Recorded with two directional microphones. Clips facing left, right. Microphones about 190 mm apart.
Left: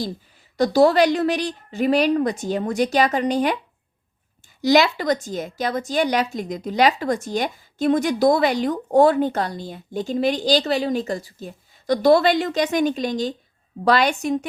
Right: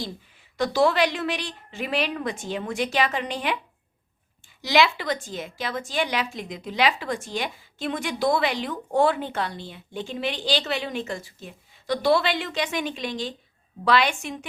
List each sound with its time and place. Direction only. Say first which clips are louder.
0.5 s a woman's voice: left 6 dB; 40° left (ahead or behind)
4.6 s a woman's voice: left 5 dB; 40° left (ahead or behind)